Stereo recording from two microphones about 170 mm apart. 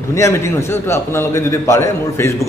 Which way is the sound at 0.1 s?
15° left (ahead or behind).